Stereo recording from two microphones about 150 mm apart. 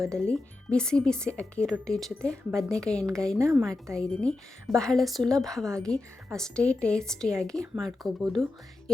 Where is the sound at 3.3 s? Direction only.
20° right (ahead or behind).